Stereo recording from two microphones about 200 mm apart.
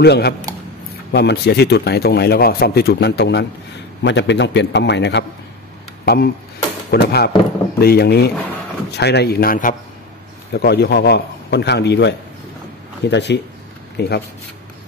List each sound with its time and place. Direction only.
0.0 s a man's voice: 55° left (ahead or behind)